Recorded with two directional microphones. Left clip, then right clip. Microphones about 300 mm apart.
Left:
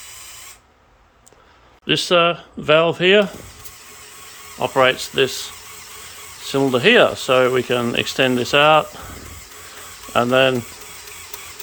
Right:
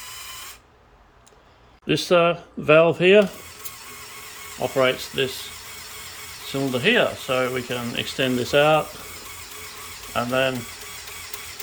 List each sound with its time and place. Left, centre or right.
1.9 s speech: centre
4.6 s speech: centre
6.5 s speech: centre
10.1 s speech: centre